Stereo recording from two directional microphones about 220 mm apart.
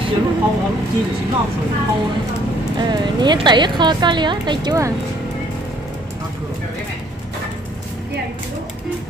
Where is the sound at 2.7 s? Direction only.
20° right (ahead or behind).